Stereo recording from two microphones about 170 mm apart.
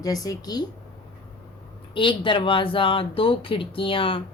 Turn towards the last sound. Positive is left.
turn(degrees=30)  # may be behind; listen again after turning